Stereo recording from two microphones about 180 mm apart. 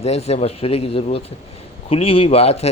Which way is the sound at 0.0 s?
35° left (ahead or behind).